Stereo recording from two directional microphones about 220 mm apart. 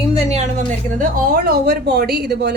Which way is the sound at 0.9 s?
40° right (ahead or behind).